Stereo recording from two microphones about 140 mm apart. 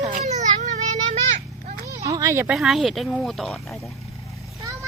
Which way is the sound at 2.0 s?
25° right (ahead or behind).